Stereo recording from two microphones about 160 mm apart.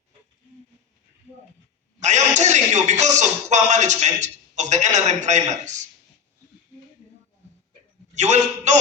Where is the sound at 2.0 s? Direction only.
45° right (ahead or behind).